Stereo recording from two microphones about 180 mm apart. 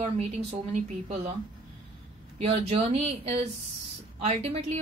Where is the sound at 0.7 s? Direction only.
35° right (ahead or behind).